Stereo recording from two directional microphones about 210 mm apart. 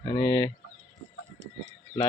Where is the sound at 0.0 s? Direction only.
20° left (ahead or behind).